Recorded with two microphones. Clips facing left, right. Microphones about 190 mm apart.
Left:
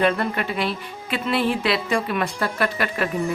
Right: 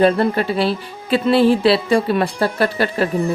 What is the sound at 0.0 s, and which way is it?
Speech, 30° right (ahead or behind).